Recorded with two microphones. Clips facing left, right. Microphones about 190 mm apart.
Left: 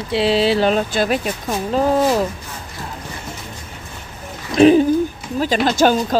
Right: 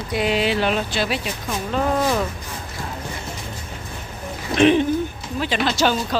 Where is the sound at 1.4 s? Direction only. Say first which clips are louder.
Left 4 dB; 35° left (ahead or behind).